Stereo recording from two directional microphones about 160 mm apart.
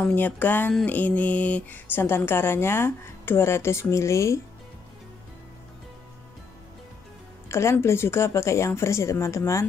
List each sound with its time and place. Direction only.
0.0 s mantra: 10° left (ahead or behind)
7.4 s mantra: 15° left (ahead or behind)